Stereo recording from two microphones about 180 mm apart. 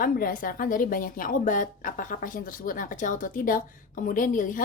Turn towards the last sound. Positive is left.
turn(degrees=45)  # may be behind; listen again after turning